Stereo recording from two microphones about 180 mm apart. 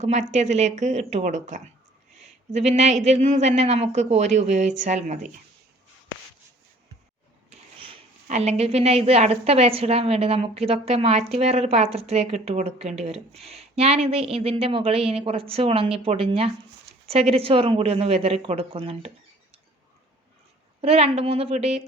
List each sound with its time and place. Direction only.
0.0 s speech: 40° right (ahead or behind)
7.8 s speech: 35° right (ahead or behind)
20.8 s speech: 35° right (ahead or behind)